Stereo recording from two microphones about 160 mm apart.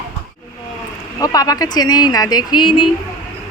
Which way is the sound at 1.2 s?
25° left (ahead or behind).